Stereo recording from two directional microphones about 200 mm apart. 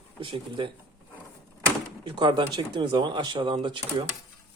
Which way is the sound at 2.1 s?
25° right (ahead or behind).